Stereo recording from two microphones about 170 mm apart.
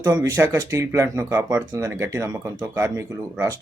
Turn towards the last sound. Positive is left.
turn(degrees=-20)  # may be behind; listen again after turning